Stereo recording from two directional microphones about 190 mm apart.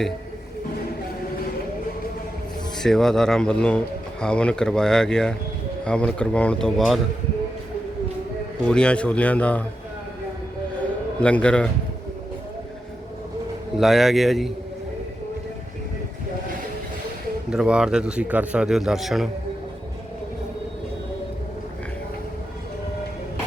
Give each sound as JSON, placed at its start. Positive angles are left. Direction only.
{"t": 2.7, "sound": "a man's voice", "side_deg": 0}
{"t": 8.6, "sound": "a man's voice", "side_deg": 5}
{"t": 11.2, "sound": "a man's voice", "side_deg": 5}
{"t": 13.7, "sound": "a man's voice", "side_deg": 0}
{"t": 17.5, "sound": "a man's voice", "side_deg": -5}